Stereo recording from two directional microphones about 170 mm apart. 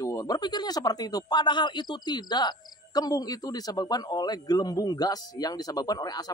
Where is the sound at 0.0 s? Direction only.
20° left (ahead or behind).